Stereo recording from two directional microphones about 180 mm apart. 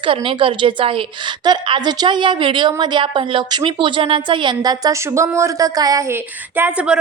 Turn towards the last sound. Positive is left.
turn(degrees=-5)  # may be behind; listen again after turning